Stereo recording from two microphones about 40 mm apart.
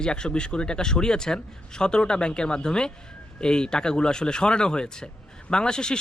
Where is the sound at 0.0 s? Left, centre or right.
Left.